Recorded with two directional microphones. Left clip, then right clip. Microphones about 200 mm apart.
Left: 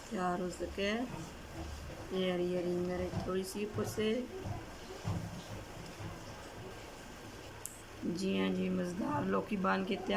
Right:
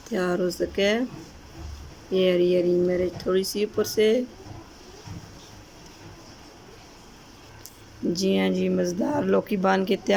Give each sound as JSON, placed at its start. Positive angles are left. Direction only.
{"t": 0.1, "sound": "speech", "side_deg": -40}
{"t": 2.1, "sound": "speech", "side_deg": -45}
{"t": 8.2, "sound": "speech", "side_deg": -40}